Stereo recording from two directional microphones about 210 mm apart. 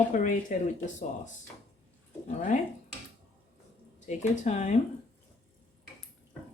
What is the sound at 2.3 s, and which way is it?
Speech, 35° left (ahead or behind).